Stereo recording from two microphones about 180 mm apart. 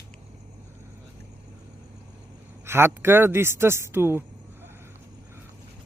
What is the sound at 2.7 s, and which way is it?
Speech, 15° right (ahead or behind).